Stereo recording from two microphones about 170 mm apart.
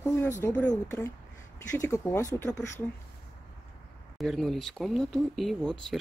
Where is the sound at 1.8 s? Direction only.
20° left (ahead or behind).